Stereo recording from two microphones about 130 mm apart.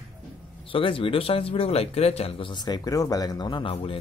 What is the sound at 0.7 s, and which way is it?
Speech, 45° left (ahead or behind).